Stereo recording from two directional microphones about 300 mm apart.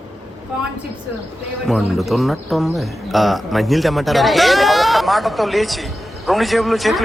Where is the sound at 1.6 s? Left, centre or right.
Centre.